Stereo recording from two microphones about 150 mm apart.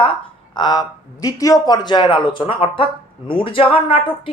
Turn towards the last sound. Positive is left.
turn(degrees=35)  # may be behind; listen again after turning